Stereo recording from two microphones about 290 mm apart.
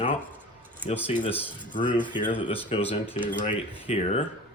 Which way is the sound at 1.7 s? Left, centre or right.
Centre.